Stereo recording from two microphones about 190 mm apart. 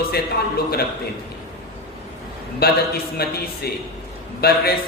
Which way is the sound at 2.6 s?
55° left (ahead or behind).